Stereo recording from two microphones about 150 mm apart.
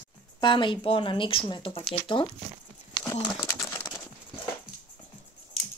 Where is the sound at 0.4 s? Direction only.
30° left (ahead or behind).